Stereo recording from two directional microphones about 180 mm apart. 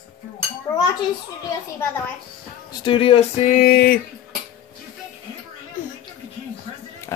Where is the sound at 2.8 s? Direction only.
30° left (ahead or behind).